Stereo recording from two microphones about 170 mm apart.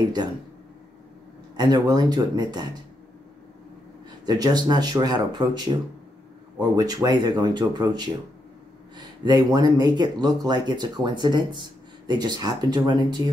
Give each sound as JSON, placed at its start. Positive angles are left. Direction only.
{"t": 1.6, "sound": "speech", "side_deg": -25}
{"t": 4.3, "sound": "speech", "side_deg": -25}
{"t": 6.7, "sound": "speech", "side_deg": -20}